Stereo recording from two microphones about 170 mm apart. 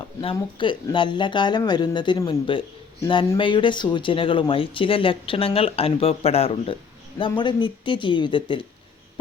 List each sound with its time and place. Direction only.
0.6 s a man's voice: 30° left (ahead or behind)